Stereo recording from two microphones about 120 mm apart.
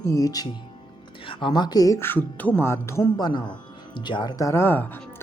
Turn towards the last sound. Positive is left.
turn(degrees=15)  # may be behind; listen again after turning